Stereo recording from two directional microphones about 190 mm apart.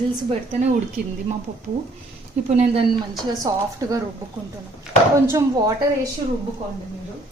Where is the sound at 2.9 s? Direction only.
20° right (ahead or behind).